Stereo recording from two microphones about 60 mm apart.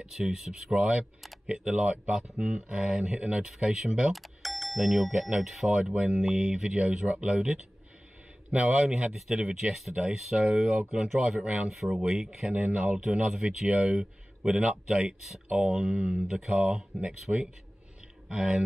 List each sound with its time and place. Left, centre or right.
0.0 s speech: centre
4.1 s speech: centre
13.0 s speech: centre
18.3 s speech: centre